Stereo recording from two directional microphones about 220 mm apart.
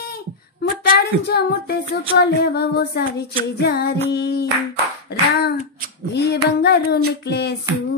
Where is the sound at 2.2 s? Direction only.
45° left (ahead or behind).